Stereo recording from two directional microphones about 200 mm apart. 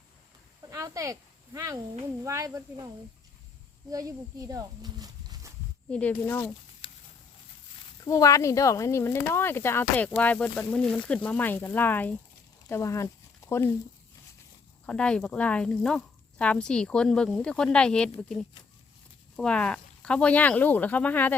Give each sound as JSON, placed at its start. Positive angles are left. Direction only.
{"t": 0.7, "sound": "speech", "side_deg": -15}
{"t": 5.9, "sound": "speech", "side_deg": 5}
{"t": 6.8, "sound": "a sound", "side_deg": 30}
{"t": 8.0, "sound": "speech", "side_deg": 15}
{"t": 14.8, "sound": "speech", "side_deg": 5}
{"t": 19.4, "sound": "speech", "side_deg": 5}